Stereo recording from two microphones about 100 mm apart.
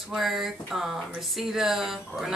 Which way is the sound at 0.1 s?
Centre (ahead or behind).